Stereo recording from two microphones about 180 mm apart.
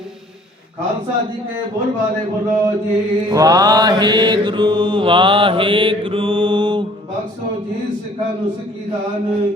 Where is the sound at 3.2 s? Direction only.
20° right (ahead or behind).